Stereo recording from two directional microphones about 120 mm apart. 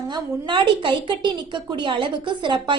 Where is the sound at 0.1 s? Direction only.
40° right (ahead or behind).